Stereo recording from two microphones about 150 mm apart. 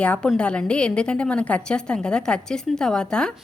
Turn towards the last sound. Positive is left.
turn(degrees=5)  # may be behind; listen again after turning